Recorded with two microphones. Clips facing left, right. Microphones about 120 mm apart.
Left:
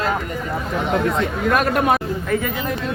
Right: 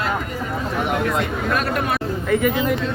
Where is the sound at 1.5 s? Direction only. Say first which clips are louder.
Left 6 dB; 50° left (ahead or behind).